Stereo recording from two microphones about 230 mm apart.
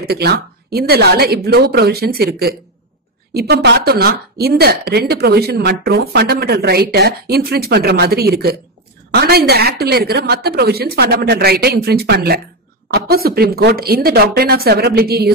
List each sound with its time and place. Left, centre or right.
0.0 s speech: right